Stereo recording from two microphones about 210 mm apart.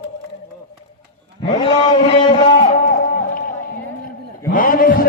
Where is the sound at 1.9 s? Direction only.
25° left (ahead or behind).